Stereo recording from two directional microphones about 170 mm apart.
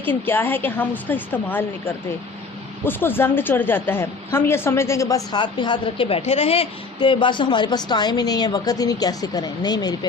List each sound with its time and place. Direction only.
0.0 s a woman's voice: 10° left (ahead or behind)